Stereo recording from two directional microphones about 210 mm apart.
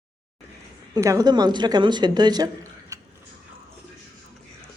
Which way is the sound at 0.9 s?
15° right (ahead or behind).